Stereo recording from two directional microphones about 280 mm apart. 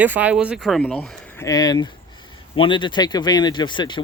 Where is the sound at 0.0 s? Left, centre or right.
Centre.